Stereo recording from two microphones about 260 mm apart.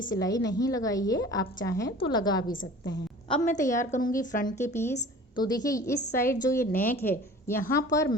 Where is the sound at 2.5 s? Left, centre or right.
Left.